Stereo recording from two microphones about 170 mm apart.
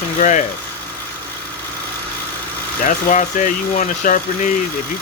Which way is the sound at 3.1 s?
50° left (ahead or behind).